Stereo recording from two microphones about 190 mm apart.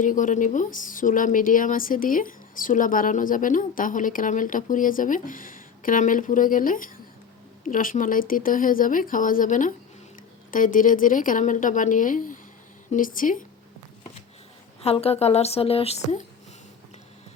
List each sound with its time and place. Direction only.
0.0 s a woman's voice: 45° left (ahead or behind)
14.8 s speech: 30° left (ahead or behind)